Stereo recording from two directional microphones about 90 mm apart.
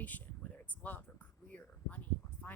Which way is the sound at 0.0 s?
15° left (ahead or behind).